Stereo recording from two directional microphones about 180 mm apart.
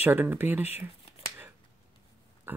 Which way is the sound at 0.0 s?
10° right (ahead or behind).